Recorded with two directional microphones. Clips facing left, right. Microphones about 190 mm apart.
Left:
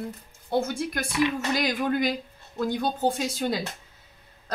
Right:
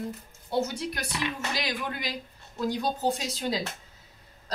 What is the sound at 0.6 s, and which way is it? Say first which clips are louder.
Speech: left 3 dB; 50° left (ahead or behind).